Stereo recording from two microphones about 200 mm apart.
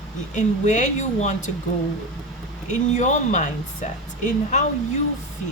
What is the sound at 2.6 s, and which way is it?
Speech, 35° left (ahead or behind).